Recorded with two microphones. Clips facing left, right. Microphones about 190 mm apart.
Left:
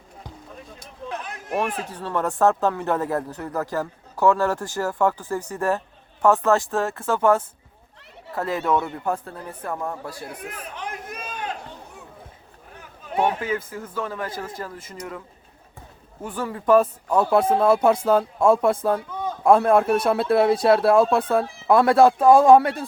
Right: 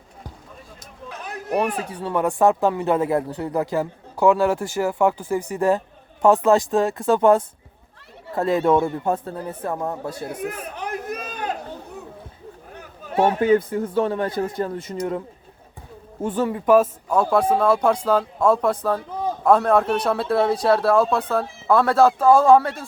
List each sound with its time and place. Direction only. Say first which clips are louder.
1.2 s a sound: right 4 dB; 35° right (ahead or behind)
1.5 s speech: right 3 dB; 10° right (ahead or behind)
8.4 s speech: right 5 dB; 25° right (ahead or behind)
10.4 s a sound: right 4 dB; 40° right (ahead or behind)
13.4 s speech: right 10 dB; 35° right (ahead or behind)
16.2 s speech: right 7 dB; 25° right (ahead or behind)
16.6 s speech: even; 5° right (ahead or behind)
17.6 s a man's voice: left 1 dB; 5° left (ahead or behind)